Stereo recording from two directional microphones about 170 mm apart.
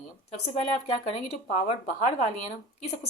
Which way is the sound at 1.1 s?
35° left (ahead or behind).